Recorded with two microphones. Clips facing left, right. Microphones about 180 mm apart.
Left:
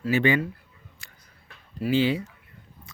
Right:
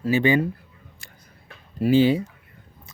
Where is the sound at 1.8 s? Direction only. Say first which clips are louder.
Right 5 dB; 45° right (ahead or behind).